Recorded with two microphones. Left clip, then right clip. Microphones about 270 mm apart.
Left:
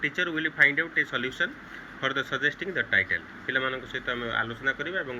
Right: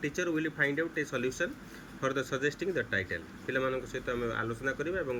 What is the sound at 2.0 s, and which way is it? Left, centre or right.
Speech, centre.